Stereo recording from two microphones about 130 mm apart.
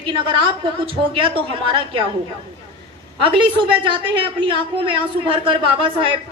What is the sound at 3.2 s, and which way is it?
A woman's voice, 40° right (ahead or behind).